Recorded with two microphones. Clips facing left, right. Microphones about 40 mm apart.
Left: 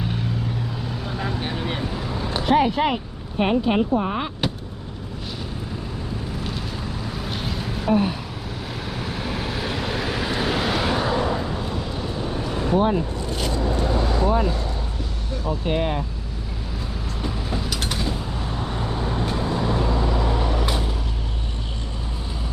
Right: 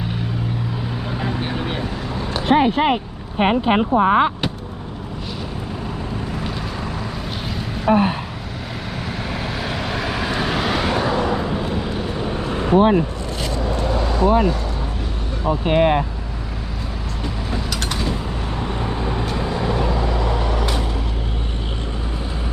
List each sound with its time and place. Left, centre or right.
1.0 s vehicle: centre
1.9 s a sound: centre
2.5 s speech: right
7.9 s speech: right
9.0 s vehicle: centre
11.3 s vehicle: right
14.3 s speech: right
17.2 s vehicle: centre